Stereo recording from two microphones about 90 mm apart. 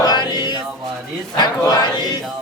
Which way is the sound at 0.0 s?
50° left (ahead or behind).